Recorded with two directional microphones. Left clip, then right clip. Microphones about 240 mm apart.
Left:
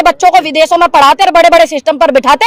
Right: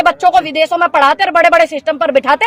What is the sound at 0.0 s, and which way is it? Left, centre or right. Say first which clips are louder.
Speech: left 4 dB; left.